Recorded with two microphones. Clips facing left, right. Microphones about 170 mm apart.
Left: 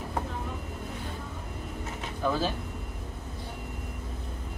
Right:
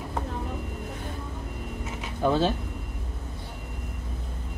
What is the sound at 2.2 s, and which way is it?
Speech, 30° right (ahead or behind).